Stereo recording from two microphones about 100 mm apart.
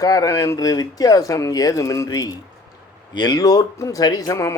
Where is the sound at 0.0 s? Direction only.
40° left (ahead or behind).